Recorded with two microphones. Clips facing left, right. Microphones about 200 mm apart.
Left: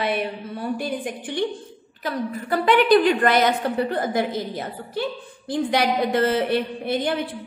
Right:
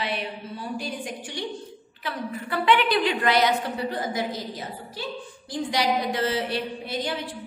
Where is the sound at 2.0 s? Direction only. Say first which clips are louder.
Left 5 dB; 40° left (ahead or behind).